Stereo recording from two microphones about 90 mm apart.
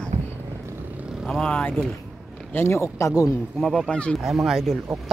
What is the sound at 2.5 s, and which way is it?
Speech, 30° left (ahead or behind).